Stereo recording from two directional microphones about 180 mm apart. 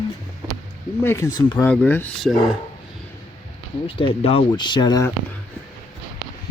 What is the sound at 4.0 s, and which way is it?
Speech, 30° left (ahead or behind).